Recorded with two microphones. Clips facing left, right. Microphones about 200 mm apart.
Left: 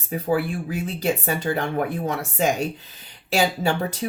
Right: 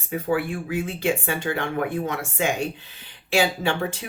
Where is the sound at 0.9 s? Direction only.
40° left (ahead or behind).